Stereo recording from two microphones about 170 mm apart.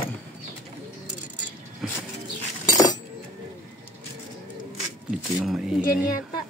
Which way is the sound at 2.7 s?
20° left (ahead or behind).